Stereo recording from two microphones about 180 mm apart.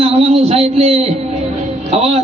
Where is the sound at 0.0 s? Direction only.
35° right (ahead or behind).